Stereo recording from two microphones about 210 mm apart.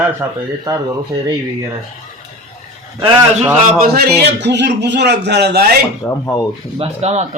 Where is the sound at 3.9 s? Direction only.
50° right (ahead or behind).